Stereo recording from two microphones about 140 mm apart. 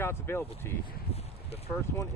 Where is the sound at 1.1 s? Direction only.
45° left (ahead or behind).